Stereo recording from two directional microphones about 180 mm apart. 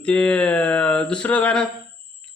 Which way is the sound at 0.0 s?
5° left (ahead or behind).